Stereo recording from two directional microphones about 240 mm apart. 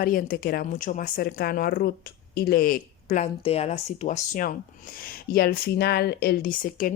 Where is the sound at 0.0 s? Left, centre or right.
Left.